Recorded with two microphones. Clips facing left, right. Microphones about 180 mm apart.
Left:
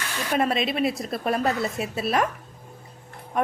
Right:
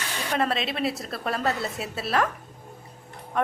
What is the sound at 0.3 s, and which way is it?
A woman's voice, 15° left (ahead or behind).